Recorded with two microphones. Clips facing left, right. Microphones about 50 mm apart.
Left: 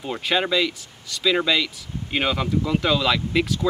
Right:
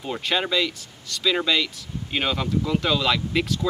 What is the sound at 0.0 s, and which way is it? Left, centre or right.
Speech, centre.